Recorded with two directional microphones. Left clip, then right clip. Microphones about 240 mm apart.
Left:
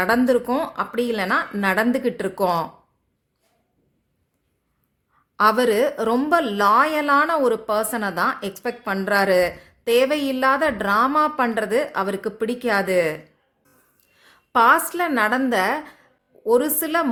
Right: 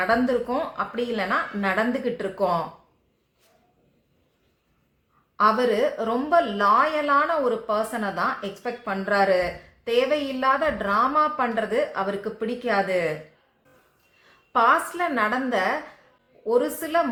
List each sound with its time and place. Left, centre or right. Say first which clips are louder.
0.0 s a woman's voice: left 3 dB; left
5.4 s a woman's voice: left 3 dB; left
14.3 s a woman's voice: left 4 dB; left